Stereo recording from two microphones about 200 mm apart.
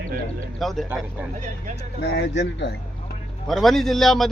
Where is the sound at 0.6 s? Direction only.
Centre (ahead or behind).